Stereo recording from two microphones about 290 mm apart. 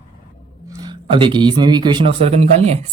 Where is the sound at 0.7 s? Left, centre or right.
Centre.